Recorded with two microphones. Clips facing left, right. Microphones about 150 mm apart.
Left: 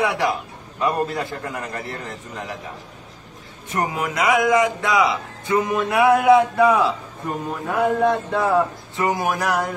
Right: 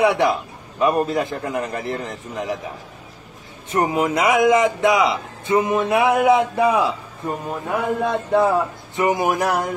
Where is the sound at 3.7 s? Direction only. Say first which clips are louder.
Right 5 dB; 20° right (ahead or behind).